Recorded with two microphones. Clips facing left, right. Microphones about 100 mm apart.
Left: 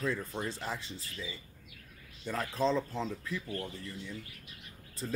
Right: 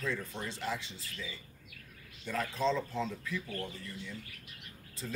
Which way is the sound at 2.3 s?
35° left (ahead or behind).